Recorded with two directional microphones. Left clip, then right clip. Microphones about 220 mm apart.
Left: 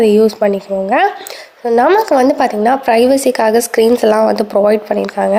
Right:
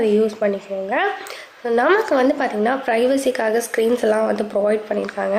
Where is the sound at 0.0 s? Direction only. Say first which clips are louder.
Left 8 dB; 30° left (ahead or behind).